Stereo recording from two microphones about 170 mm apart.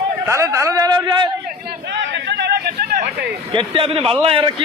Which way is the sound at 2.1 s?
85° right.